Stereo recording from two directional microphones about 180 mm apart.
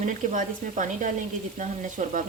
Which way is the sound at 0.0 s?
45° right (ahead or behind).